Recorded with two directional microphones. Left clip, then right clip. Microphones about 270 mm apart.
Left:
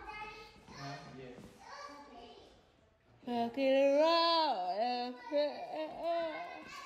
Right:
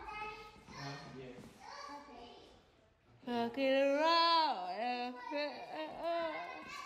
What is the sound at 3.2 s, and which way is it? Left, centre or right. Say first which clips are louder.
Speech: left 2 dB; centre.